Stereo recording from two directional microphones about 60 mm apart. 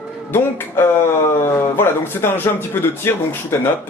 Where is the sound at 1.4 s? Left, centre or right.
Left.